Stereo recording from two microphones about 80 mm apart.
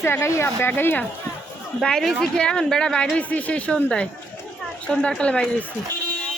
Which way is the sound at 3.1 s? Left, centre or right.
Centre.